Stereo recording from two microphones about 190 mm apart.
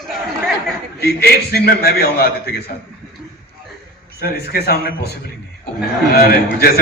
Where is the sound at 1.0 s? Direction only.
55° left (ahead or behind).